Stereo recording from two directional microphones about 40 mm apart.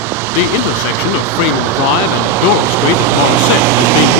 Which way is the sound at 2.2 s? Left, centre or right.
Right.